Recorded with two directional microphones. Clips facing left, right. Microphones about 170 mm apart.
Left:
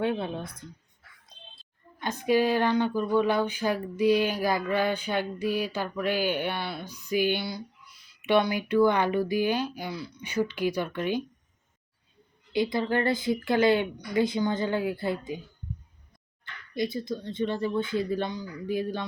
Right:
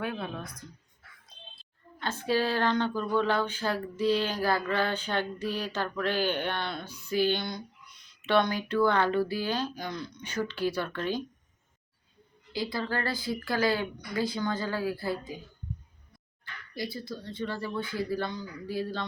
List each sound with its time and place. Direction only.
0.0 s a woman's voice: 25° left (ahead or behind)
2.0 s speech: 15° left (ahead or behind)
12.5 s a woman's voice: 20° left (ahead or behind)
16.7 s a woman's voice: 20° left (ahead or behind)